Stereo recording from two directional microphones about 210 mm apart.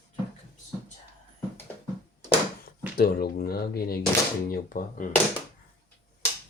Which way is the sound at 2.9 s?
45° left (ahead or behind).